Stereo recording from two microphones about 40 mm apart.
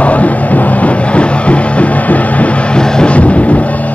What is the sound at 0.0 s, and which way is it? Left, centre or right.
Music, left.